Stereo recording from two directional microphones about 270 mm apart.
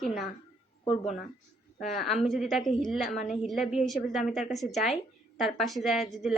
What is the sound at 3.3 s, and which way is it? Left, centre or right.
Speech, centre.